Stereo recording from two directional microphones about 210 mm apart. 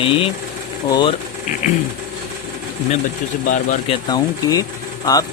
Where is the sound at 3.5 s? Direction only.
35° left (ahead or behind).